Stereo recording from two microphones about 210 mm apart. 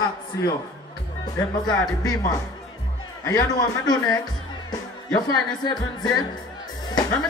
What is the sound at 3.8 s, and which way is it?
Music, 20° left (ahead or behind).